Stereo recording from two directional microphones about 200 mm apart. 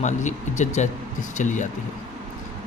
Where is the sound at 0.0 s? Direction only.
35° left (ahead or behind).